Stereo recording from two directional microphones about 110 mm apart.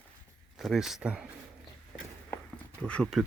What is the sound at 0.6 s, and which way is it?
Speech, centre (ahead or behind).